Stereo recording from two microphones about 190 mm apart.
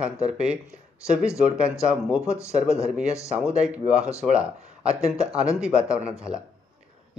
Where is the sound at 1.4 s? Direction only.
5° right (ahead or behind).